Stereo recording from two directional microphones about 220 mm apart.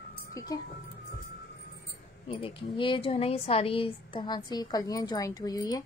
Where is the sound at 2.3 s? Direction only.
25° left (ahead or behind).